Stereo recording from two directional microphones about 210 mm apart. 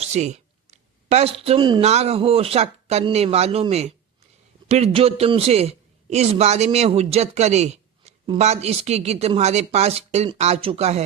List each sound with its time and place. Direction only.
0.0 s a man's voice: 35° right (ahead or behind)